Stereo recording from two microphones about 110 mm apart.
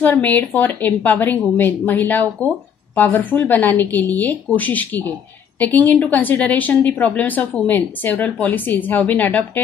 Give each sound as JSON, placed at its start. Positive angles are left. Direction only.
{"t": 0.0, "sound": "a woman's voice", "side_deg": 15}